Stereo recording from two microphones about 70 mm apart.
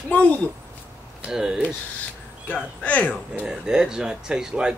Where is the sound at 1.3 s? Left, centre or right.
Centre.